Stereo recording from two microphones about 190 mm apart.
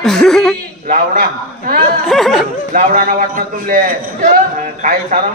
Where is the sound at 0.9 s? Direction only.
50° right (ahead or behind).